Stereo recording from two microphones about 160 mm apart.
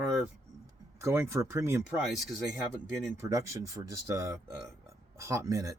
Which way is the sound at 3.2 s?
20° right (ahead or behind).